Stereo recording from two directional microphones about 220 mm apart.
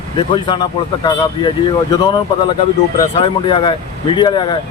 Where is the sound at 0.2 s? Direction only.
20° left (ahead or behind).